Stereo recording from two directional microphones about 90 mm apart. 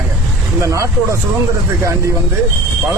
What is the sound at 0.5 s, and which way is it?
Speech, 35° right (ahead or behind).